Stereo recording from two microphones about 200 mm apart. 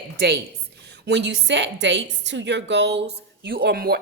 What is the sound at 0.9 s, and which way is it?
A woman's voice, 60° right (ahead or behind).